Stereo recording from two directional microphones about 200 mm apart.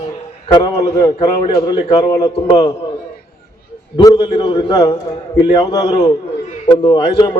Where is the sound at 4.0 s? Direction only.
20° left (ahead or behind).